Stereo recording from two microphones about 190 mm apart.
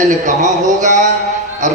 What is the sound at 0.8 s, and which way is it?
Speech, 40° right (ahead or behind).